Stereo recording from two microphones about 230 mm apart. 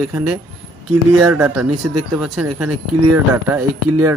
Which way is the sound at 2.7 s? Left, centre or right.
Right.